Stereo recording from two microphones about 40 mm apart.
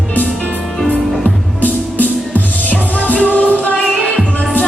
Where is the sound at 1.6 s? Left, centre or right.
Left.